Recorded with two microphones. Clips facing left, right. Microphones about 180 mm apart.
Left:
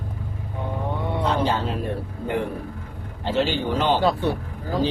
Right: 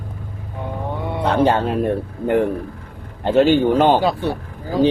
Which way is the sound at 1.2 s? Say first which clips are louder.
Right 8 dB; 60° right (ahead or behind).